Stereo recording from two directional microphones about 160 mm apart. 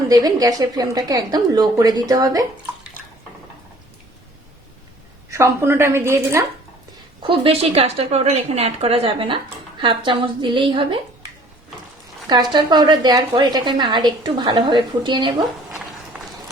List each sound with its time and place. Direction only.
0.1 s a woman's voice: 25° right (ahead or behind)
5.3 s a woman's voice: 15° right (ahead or behind)
7.2 s a woman's voice: 35° right (ahead or behind)
12.3 s a woman's voice: 25° right (ahead or behind)